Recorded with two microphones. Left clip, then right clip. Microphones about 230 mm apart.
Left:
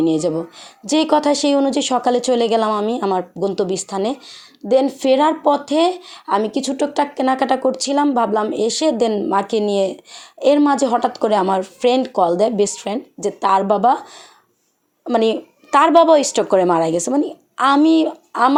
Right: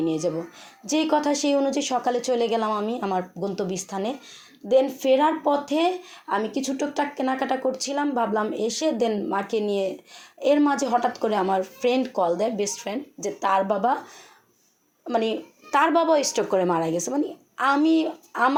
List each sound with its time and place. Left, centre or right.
0.0 s speech: left
15.0 s speech: left